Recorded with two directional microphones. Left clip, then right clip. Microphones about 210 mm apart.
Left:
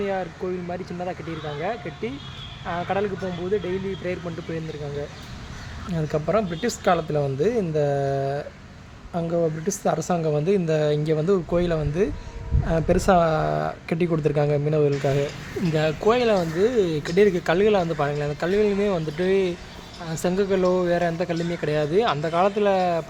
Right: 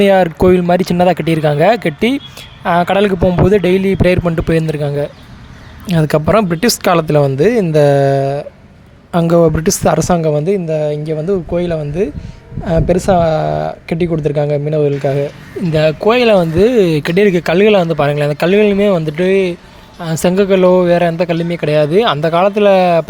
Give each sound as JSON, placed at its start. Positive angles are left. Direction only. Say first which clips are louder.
{"t": 0.0, "sound": "speech", "louder": "right 18 dB", "side_deg": -60}
{"t": 5.9, "sound": "speech", "louder": "right 12 dB", "side_deg": -50}
{"t": 9.1, "sound": "speech", "louder": "right 13 dB", "side_deg": -55}
{"t": 10.5, "sound": "a woman's voice", "louder": "right 6 dB", "side_deg": -10}